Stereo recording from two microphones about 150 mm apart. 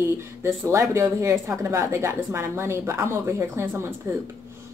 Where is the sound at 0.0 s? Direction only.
15° right (ahead or behind).